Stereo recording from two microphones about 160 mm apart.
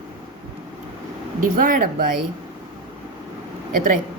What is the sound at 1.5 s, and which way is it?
Speech, 60° right (ahead or behind).